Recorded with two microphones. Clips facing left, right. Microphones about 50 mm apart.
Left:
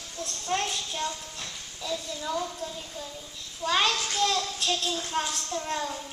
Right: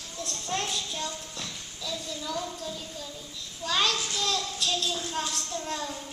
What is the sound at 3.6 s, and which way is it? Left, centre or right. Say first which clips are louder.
A child's voice: left 2 dB; left.